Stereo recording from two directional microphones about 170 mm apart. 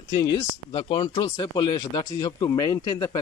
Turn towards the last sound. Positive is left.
turn(degrees=20)  # may be behind; listen again after turning